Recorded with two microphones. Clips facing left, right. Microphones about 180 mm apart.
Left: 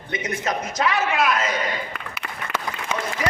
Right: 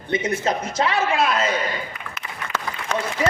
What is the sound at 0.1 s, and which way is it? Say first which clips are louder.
A man's voice: right 4 dB; 30° right (ahead or behind).